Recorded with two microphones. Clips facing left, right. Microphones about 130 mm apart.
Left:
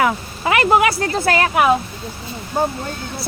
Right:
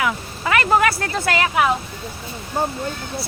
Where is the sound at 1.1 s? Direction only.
40° left (ahead or behind).